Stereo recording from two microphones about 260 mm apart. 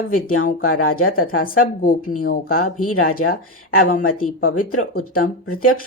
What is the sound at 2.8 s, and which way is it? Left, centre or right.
Speech, left.